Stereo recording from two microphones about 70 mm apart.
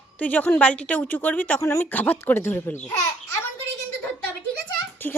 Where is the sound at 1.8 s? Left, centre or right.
Left.